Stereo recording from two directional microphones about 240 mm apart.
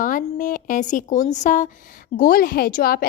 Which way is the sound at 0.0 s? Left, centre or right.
Left.